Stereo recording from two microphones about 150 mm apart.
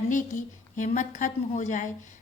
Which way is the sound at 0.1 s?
60° left (ahead or behind).